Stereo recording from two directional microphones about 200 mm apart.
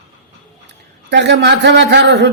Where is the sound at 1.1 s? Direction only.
60° right (ahead or behind).